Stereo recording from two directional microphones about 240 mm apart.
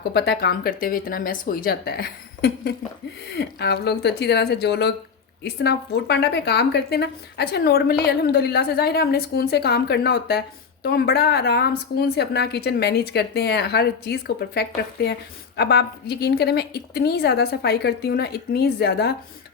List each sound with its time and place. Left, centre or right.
0.1 s a woman's voice: left